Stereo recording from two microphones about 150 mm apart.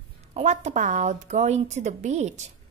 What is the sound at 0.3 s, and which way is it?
A woman's voice, 50° right (ahead or behind).